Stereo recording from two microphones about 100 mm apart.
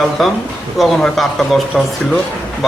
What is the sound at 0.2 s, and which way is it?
Speech, centre (ahead or behind).